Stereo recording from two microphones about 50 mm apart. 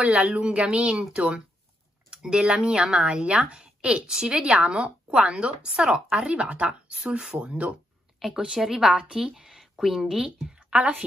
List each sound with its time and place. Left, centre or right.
0.0 s speech: right
8.5 s a woman's voice: centre
10.7 s a woman's voice: right